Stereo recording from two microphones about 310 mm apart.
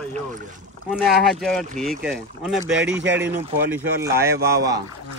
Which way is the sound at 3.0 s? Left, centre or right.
Right.